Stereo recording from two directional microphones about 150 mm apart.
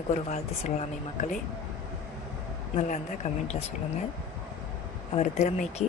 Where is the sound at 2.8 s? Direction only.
50° left (ahead or behind).